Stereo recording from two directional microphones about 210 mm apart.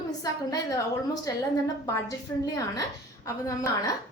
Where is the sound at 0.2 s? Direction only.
15° left (ahead or behind).